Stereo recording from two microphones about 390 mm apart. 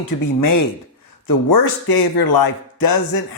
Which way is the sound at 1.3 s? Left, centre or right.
Left.